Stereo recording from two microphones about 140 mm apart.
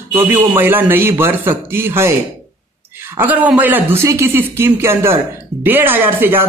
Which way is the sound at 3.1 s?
10° right (ahead or behind).